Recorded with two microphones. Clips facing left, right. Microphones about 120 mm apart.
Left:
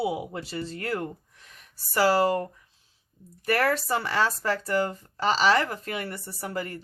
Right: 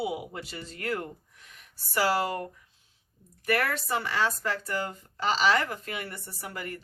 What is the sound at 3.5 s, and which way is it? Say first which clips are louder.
Speech: left 4 dB; 35° left (ahead or behind).